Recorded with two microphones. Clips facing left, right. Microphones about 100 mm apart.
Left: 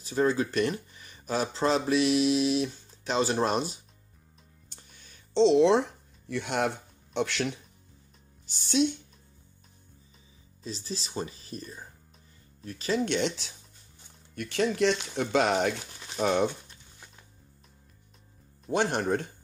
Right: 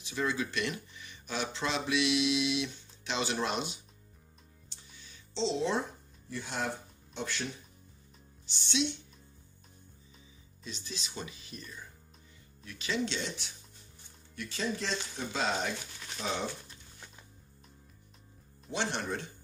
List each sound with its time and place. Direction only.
0.0 s speech: 40° left (ahead or behind)
4.6 s a sound: 50° left (ahead or behind); by 6.7 s 65° left (ahead or behind)
7.2 s speech: 75° left (ahead or behind)
8.5 s speech: 45° left (ahead or behind)
10.6 s speech: 35° left (ahead or behind)
13.1 s speech: 70° left (ahead or behind)
14.3 s speech: 60° left (ahead or behind)
18.7 s speech: 50° left (ahead or behind)